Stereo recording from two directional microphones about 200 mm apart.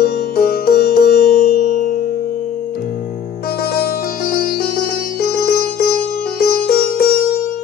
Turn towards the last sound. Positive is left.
turn(degrees=50)  # may be behind; listen again after turning